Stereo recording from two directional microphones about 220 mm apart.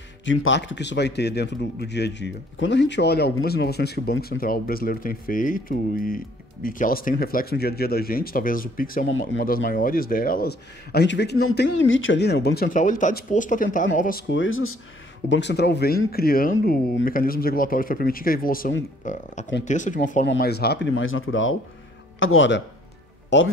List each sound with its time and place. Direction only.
0.2 s speech: 60° left (ahead or behind); by 14.2 s 40° left (ahead or behind)
14.3 s speech: 60° left (ahead or behind)
15.2 s speech: 55° left (ahead or behind); by 20.0 s 35° left (ahead or behind)
20.2 s speech: 45° left (ahead or behind)
20.9 s speech: 65° left (ahead or behind)